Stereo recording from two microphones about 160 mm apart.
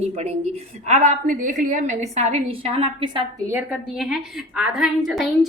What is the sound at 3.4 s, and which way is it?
A woman's voice, 10° right (ahead or behind).